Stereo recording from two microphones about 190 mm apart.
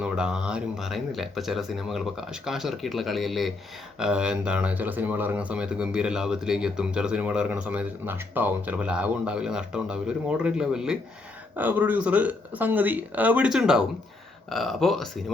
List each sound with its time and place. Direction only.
0.0 s speech: 5° right (ahead or behind)